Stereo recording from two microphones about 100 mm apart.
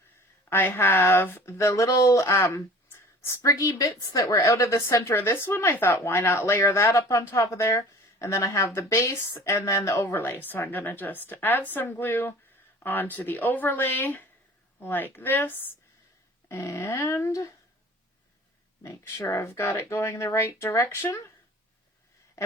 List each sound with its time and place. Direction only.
0.5 s speech: 20° left (ahead or behind)
1.5 s speech: 30° left (ahead or behind)
18.8 s speech: 35° left (ahead or behind)
22.4 s a sound: 30° left (ahead or behind)